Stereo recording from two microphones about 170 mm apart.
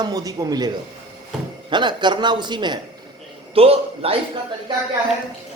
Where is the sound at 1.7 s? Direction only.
25° right (ahead or behind).